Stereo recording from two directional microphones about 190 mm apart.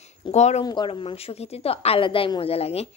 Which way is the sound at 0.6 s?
25° left (ahead or behind).